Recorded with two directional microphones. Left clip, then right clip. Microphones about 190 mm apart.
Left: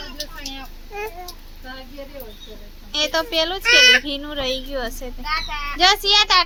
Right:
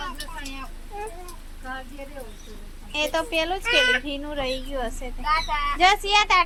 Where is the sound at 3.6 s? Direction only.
45° left (ahead or behind).